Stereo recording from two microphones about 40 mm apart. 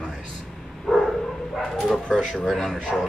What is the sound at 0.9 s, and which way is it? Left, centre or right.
Bow-wow, centre.